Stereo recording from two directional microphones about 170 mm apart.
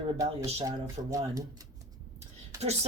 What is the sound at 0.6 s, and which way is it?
Speech, 20° right (ahead or behind).